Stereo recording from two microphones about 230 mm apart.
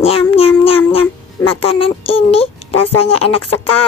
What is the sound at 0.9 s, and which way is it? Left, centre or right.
Speech, left.